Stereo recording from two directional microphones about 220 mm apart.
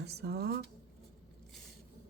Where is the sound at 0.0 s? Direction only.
50° right (ahead or behind).